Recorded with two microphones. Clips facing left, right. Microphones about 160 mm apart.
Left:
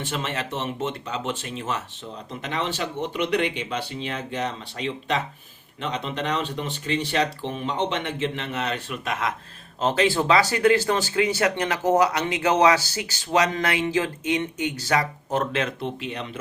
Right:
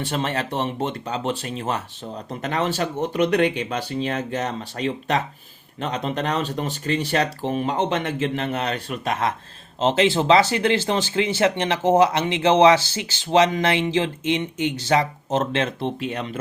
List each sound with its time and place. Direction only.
0.0 s speech: 35° right (ahead or behind)